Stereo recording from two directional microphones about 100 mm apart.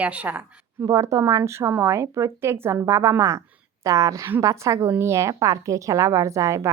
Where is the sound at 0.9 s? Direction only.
30° right (ahead or behind).